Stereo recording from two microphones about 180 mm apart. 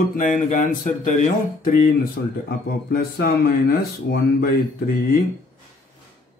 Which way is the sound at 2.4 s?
60° left (ahead or behind).